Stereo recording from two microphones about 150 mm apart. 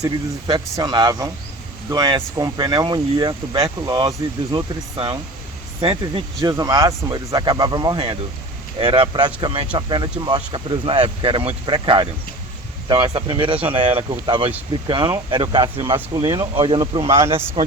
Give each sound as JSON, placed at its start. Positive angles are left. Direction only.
{"t": 0.0, "sound": "speech", "side_deg": -25}